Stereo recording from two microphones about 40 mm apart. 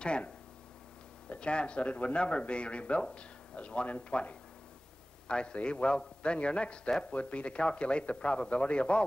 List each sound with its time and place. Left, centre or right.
1.4 s speech: left
7.0 s speech: left